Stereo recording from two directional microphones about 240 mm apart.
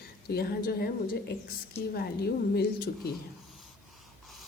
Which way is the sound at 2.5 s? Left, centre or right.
Left.